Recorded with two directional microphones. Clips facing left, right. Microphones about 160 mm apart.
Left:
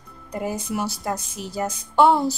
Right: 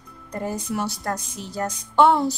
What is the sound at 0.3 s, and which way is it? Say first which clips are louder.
A woman's voice: left 1 dB; 5° left (ahead or behind).